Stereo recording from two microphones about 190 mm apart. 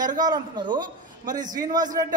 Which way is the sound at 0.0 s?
20° right (ahead or behind).